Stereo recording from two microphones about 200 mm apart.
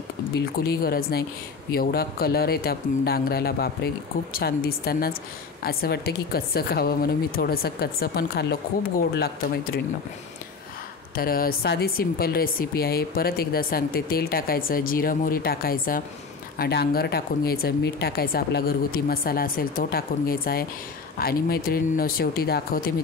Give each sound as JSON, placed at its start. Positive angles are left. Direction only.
{"t": 0.7, "sound": "speech", "side_deg": 50}
{"t": 11.1, "sound": "speech", "side_deg": 45}